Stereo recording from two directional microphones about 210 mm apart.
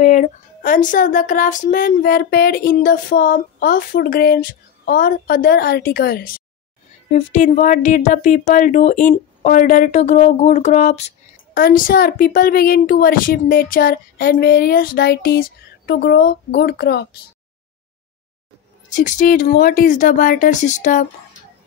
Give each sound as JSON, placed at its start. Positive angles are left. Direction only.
{"t": 0.0, "sound": "speech", "side_deg": 35}
{"t": 7.1, "sound": "a woman's voice", "side_deg": 35}
{"t": 18.9, "sound": "a woman's voice", "side_deg": 35}